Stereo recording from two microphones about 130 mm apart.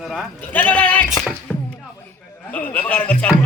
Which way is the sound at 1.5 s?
10° left (ahead or behind).